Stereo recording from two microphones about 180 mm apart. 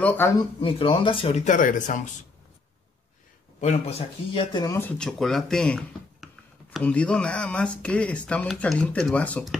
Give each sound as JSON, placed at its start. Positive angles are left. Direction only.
{"t": 0.0, "sound": "speech", "side_deg": 10}
{"t": 0.6, "sound": "speech", "side_deg": 30}
{"t": 3.6, "sound": "speech", "side_deg": 30}